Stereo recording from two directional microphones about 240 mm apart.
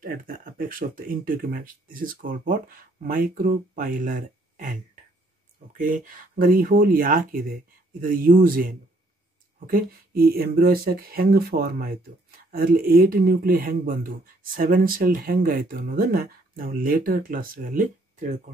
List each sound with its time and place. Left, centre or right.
0.0 s speech: right